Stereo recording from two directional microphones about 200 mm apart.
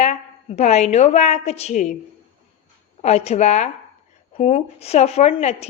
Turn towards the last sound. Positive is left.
turn(degrees=35)  # may be behind; listen again after turning